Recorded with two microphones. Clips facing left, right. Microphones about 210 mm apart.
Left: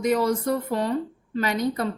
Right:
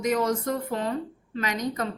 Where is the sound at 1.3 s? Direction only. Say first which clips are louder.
Left 4 dB; 35° left (ahead or behind).